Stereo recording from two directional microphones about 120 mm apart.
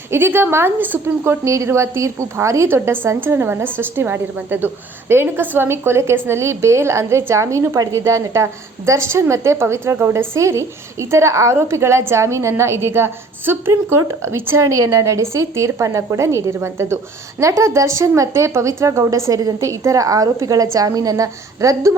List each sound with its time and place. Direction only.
0.1 s a woman's voice: 20° right (ahead or behind)